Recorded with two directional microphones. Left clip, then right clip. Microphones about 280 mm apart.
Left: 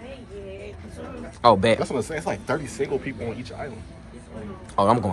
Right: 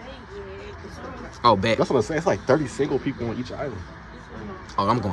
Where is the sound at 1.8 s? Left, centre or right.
Right.